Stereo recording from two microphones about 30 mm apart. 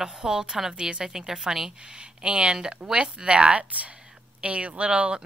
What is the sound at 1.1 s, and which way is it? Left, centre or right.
Speech, centre.